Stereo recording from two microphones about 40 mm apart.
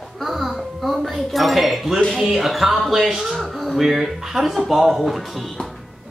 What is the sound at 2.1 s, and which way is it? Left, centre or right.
Speech, centre.